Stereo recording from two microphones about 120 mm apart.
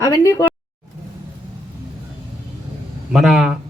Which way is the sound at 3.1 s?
Centre (ahead or behind).